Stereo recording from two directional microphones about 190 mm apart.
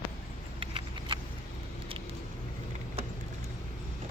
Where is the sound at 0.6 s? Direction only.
25° right (ahead or behind).